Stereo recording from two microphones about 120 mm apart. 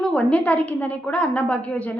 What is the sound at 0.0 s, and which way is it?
A woman's voice, 10° left (ahead or behind).